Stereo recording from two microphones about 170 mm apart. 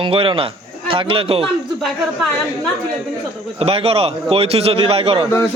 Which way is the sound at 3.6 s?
35° right (ahead or behind).